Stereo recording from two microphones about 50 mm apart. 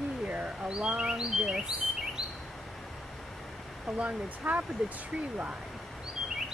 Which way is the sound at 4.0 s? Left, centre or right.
Right.